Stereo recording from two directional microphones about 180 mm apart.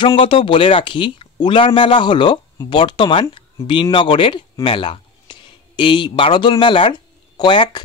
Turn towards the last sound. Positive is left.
turn(degrees=25)  # may be behind; listen again after turning